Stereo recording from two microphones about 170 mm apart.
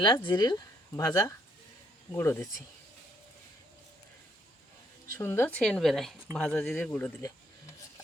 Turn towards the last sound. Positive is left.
turn(degrees=15)  # may be behind; listen again after turning